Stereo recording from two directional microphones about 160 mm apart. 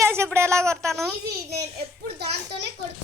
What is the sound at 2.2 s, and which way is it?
Speech, 90° right.